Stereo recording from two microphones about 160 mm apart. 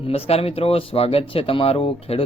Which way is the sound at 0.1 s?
40° left (ahead or behind).